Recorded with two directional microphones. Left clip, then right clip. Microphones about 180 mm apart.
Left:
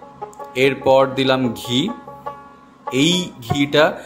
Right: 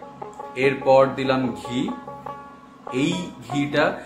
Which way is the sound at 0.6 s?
60° left (ahead or behind).